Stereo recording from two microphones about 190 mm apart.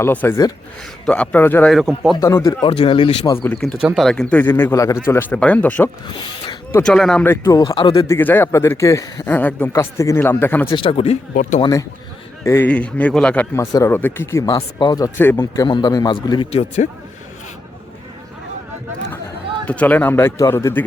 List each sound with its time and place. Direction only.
0.0 s speech: 10° left (ahead or behind)
1.7 s speech: centre (ahead or behind)
2.2 s a man's voice: 15° left (ahead or behind)
3.3 s speech: 10° left (ahead or behind)
6.1 s a man's voice: 25° left (ahead or behind)
6.7 s speech: 5° left (ahead or behind)
10.7 s a man's voice: 25° left (ahead or behind)
11.6 s speech: 20° left (ahead or behind)
15.6 s a man's voice: 20° left (ahead or behind)
19.6 s speech: 5° left (ahead or behind)